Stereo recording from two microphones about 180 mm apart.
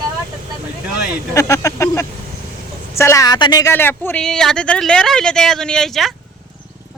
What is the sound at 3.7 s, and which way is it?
Speech, 10° left (ahead or behind).